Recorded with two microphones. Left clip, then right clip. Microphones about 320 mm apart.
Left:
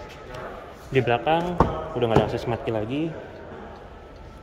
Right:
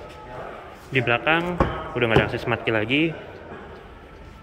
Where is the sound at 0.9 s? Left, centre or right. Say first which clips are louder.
Right 1 dB; centre.